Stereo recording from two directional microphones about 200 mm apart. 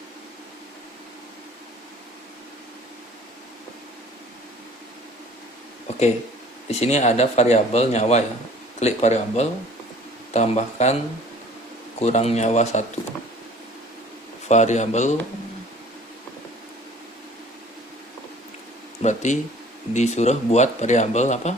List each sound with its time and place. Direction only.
6.7 s speech: 30° left (ahead or behind)
11.9 s speech: 30° left (ahead or behind)
14.4 s speech: 35° left (ahead or behind)
19.0 s speech: 35° left (ahead or behind)